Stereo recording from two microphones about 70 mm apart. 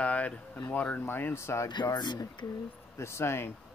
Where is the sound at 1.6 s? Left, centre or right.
Left.